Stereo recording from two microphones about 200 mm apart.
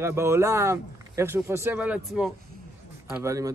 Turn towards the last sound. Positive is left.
turn(degrees=-15)  # may be behind; listen again after turning